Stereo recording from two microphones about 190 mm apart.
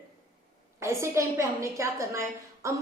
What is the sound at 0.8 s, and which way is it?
A woman's voice, 15° right (ahead or behind).